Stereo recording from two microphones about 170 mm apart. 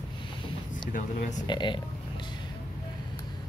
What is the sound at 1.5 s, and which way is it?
Speech, 25° left (ahead or behind).